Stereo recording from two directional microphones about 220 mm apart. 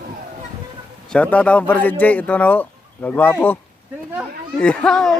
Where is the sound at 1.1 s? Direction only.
5° left (ahead or behind).